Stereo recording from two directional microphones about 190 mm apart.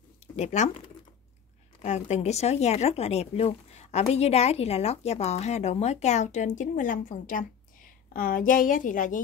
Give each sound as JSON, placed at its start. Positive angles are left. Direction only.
{"t": 0.4, "sound": "speech", "side_deg": 40}